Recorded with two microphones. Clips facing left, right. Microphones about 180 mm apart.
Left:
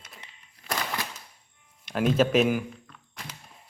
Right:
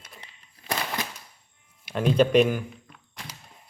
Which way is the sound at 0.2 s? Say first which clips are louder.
Right 1 dB; 35° right (ahead or behind).